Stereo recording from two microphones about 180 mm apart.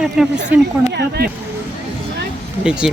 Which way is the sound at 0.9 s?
65° right (ahead or behind).